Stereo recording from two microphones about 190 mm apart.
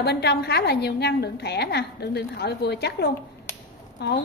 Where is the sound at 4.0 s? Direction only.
60° left (ahead or behind).